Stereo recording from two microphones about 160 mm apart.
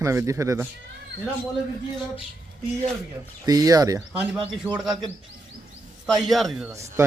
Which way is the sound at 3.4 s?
25° right (ahead or behind).